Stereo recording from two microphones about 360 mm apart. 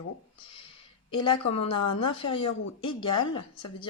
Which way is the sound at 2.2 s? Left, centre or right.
Centre.